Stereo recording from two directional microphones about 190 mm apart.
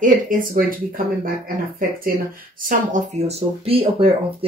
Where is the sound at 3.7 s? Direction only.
30° right (ahead or behind).